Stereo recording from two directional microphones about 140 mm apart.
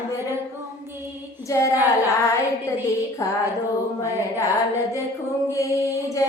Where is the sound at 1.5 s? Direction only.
20° left (ahead or behind).